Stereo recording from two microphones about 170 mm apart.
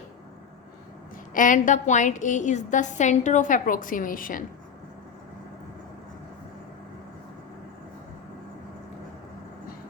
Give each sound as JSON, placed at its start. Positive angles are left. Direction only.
{"t": 1.3, "sound": "a woman's voice", "side_deg": 50}